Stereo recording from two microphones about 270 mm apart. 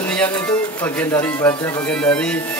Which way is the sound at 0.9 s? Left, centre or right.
Centre.